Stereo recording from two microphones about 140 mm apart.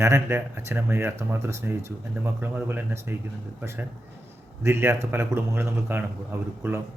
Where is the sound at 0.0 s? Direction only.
15° right (ahead or behind).